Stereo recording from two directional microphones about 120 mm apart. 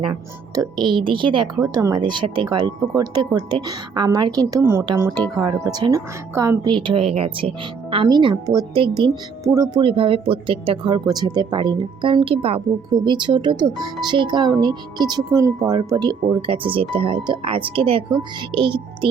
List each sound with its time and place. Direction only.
0.5 s speech: 35° right (ahead or behind)
1.6 s speech: 30° right (ahead or behind)
4.6 s speech: 20° right (ahead or behind)
4.9 s speech: 35° right (ahead or behind)
6.7 s speech: 45° right (ahead or behind)
8.0 s speech: 40° right (ahead or behind)
8.7 s speech: 50° right (ahead or behind)
9.4 s speech: 25° right (ahead or behind)
9.8 s speech: 50° right (ahead or behind)
12.9 s speech: 40° right (ahead or behind)